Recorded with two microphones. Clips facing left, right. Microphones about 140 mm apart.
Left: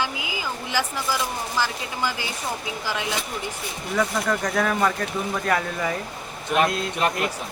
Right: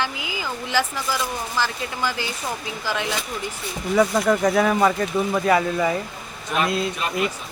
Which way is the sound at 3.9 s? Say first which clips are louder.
Right 5 dB; 10° right (ahead or behind).